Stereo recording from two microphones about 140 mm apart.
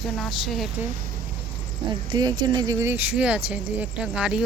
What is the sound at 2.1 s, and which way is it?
Speech, 30° right (ahead or behind).